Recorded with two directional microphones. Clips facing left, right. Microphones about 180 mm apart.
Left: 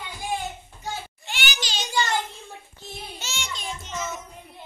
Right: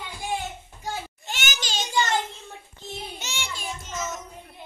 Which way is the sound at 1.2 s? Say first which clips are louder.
Even; 45° right (ahead or behind).